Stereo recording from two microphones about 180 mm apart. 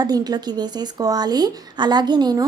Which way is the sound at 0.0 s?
20° right (ahead or behind).